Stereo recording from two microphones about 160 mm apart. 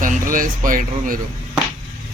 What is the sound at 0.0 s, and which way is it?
Speech, 55° right (ahead or behind).